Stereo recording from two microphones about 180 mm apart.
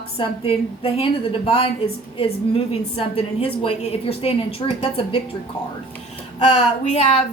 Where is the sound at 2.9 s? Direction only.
30° left (ahead or behind).